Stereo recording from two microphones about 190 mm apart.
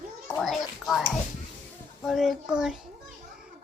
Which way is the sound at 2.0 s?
Centre (ahead or behind).